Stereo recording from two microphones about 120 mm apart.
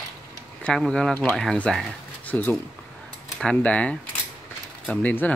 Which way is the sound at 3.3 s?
10° left (ahead or behind).